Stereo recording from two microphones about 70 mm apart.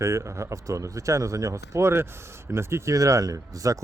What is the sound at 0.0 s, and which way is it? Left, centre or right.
Speech, right.